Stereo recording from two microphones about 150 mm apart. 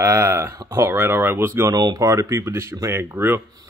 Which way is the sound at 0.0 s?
20° right (ahead or behind).